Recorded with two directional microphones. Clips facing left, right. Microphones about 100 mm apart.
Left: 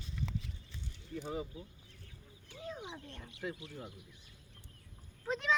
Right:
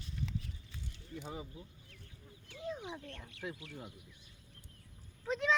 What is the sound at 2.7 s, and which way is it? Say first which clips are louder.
Speech: right 1 dB; 20° left (ahead or behind).